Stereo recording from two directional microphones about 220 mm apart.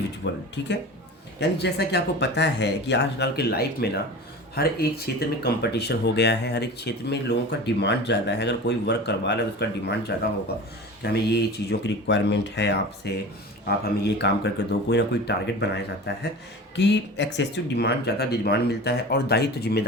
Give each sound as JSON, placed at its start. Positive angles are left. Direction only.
{"t": 0.2, "sound": "speech", "side_deg": 55}
{"t": 14.2, "sound": "speech", "side_deg": 50}